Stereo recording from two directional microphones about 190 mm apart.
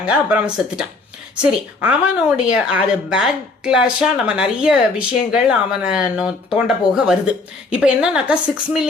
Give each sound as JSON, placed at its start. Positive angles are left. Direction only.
{"t": 0.0, "sound": "a woman's voice", "side_deg": -5}